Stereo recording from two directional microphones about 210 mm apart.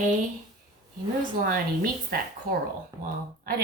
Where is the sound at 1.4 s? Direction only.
45° right (ahead or behind).